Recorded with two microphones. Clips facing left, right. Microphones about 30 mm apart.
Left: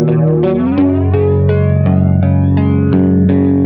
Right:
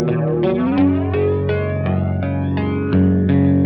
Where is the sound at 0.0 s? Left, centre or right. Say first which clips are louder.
Left 5 dB; centre.